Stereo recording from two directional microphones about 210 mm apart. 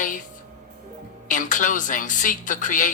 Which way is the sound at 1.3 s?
40° left (ahead or behind).